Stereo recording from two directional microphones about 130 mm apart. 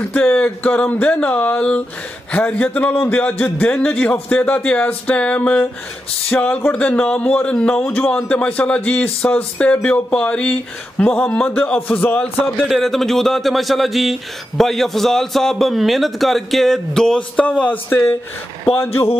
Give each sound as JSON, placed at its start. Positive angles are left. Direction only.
{"t": 0.0, "sound": "speech", "side_deg": 10}
{"t": 12.6, "sound": "a man's voice", "side_deg": 0}